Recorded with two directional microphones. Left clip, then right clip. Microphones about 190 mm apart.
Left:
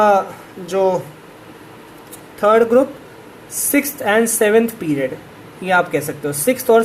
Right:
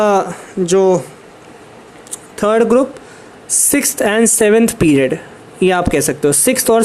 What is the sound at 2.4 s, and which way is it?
A man's voice, 50° right (ahead or behind).